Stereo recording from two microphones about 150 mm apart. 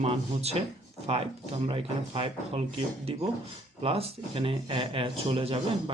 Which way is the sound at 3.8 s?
40° right (ahead or behind).